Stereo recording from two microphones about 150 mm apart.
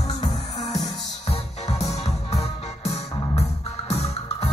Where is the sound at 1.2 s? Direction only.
45° left (ahead or behind).